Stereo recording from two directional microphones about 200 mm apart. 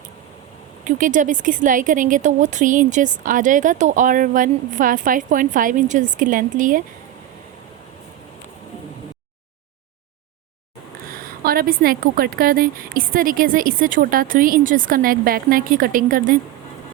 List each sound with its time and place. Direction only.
0.9 s speech: 40° right (ahead or behind)
11.4 s a woman's voice: 45° right (ahead or behind)